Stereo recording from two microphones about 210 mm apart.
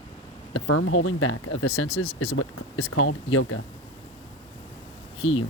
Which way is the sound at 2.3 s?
75° left (ahead or behind).